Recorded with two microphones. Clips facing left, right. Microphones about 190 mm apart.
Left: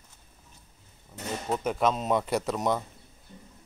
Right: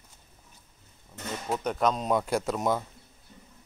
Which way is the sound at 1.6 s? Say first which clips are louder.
Even; 5° left (ahead or behind).